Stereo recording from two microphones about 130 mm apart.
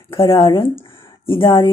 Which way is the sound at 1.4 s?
20° left (ahead or behind).